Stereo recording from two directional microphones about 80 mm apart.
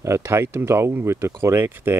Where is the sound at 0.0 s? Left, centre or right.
Right.